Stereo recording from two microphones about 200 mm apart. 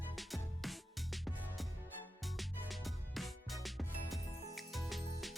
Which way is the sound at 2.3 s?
Centre (ahead or behind).